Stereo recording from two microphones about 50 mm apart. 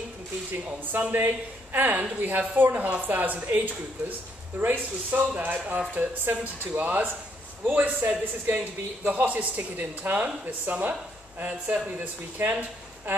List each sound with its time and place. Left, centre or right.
1.1 s a man's voice: right
5.2 s a man's voice: right
10.1 s a man's voice: right
12.4 s speech: right